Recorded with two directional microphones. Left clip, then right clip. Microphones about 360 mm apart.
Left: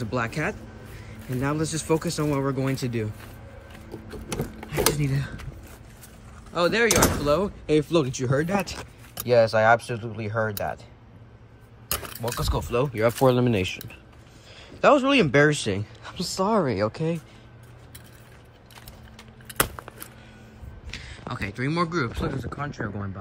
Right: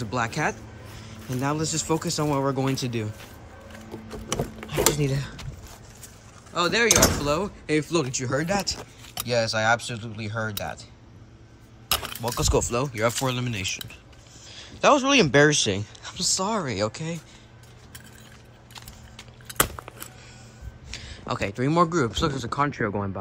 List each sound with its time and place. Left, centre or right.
0.0 s speech: centre
4.3 s a sound: centre
6.5 s speech: centre
11.9 s keys jangling: centre
12.7 s speech: centre
19.1 s a sound: centre
21.3 s speech: centre
22.8 s speech: left